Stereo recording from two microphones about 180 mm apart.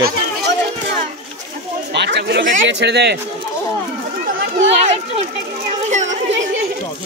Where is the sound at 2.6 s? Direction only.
75° right (ahead or behind).